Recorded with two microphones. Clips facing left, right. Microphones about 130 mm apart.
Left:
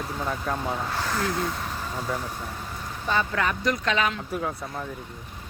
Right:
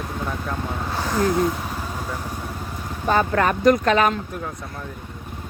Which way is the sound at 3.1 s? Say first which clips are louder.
Right 6 dB; 50° right (ahead or behind).